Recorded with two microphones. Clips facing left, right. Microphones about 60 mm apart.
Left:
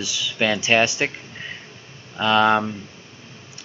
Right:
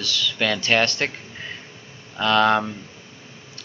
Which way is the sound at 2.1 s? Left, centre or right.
Centre.